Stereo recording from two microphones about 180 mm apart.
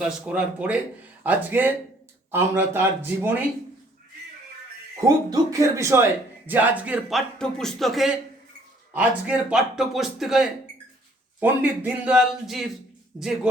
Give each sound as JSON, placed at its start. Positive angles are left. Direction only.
{"t": 0.0, "sound": "a man's voice", "side_deg": -5}
{"t": 4.9, "sound": "a man's voice", "side_deg": -20}